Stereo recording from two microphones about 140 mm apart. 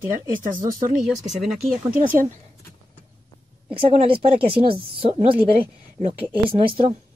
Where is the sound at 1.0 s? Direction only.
Centre (ahead or behind).